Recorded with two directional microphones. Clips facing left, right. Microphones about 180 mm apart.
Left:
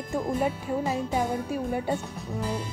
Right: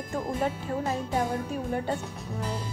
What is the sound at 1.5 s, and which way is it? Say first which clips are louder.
Speech: left 2 dB; 10° left (ahead or behind).